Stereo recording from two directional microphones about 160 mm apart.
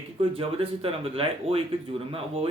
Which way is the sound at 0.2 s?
35° right (ahead or behind).